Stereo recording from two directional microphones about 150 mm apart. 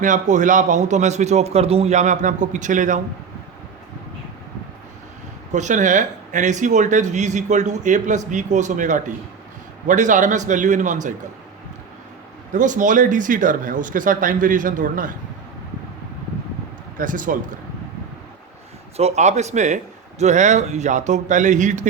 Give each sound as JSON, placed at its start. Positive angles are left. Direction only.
{"t": 0.0, "sound": "a man's voice", "side_deg": -55}
{"t": 5.5, "sound": "a man's voice", "side_deg": -55}
{"t": 12.5, "sound": "speech", "side_deg": -60}
{"t": 17.0, "sound": "speech", "side_deg": -60}
{"t": 18.9, "sound": "a man's voice", "side_deg": -45}